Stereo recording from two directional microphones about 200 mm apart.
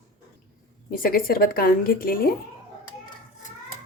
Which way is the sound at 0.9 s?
50° left (ahead or behind).